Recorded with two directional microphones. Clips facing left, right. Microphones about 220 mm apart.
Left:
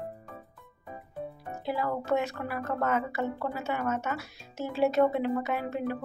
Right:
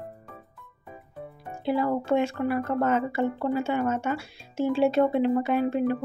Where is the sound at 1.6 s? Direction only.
30° right (ahead or behind).